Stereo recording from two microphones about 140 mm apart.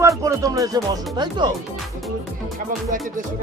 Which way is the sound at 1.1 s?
30° right (ahead or behind).